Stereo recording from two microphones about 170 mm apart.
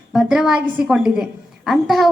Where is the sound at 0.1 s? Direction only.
Centre (ahead or behind).